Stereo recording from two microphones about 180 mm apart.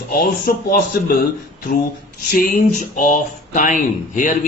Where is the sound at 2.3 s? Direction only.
50° left (ahead or behind).